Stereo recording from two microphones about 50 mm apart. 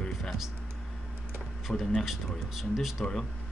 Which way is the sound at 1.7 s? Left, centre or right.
Left.